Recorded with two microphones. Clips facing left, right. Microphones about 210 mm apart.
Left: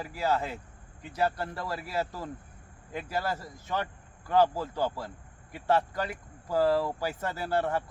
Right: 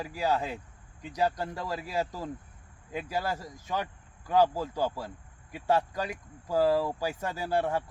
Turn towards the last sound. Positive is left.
turn(degrees=-10)  # may be behind; listen again after turning